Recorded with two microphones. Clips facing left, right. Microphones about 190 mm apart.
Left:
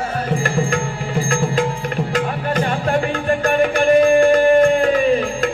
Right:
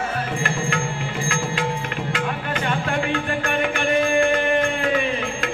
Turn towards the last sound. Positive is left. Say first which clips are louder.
# left 8 dB
turn(degrees=40)  # may be behind; listen again after turning